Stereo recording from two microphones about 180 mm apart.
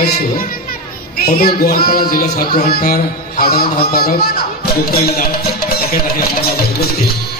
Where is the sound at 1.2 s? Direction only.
60° left (ahead or behind).